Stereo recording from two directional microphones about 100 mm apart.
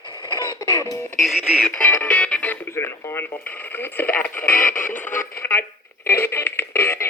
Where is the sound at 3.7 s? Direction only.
20° left (ahead or behind).